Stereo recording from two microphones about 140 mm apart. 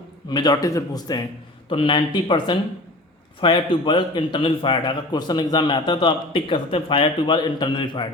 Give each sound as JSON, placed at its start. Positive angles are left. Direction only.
{"t": 0.3, "sound": "a man's voice", "side_deg": 30}
{"t": 1.7, "sound": "a man's voice", "side_deg": 40}